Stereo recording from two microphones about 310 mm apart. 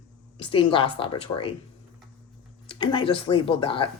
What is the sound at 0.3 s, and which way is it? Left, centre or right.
A woman's voice, centre.